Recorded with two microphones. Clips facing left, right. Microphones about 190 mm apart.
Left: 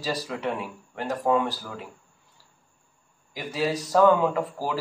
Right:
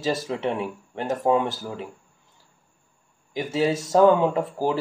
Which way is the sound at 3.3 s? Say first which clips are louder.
Right 4 dB; 25° right (ahead or behind).